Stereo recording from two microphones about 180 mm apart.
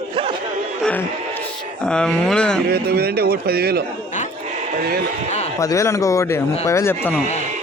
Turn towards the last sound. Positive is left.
turn(degrees=10)  # may be behind; listen again after turning